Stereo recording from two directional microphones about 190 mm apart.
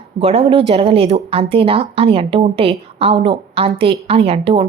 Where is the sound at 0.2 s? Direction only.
30° right (ahead or behind).